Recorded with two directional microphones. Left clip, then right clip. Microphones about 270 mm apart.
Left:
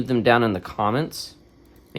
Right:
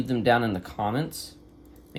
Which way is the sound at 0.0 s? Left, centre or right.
Left.